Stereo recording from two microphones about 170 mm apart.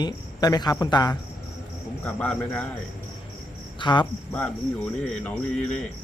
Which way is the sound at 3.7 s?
25° left (ahead or behind).